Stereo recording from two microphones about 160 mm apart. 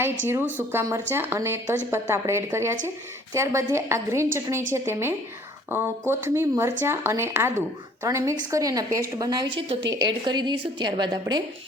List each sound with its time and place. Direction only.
0.0 s a woman's voice: 15° right (ahead or behind)